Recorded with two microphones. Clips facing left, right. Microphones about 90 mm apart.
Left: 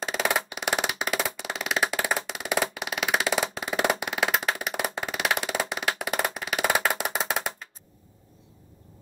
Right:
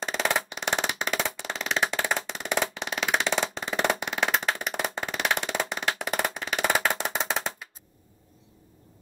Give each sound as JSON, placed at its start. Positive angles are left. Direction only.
{"t": 0.0, "sound": "music", "side_deg": 5}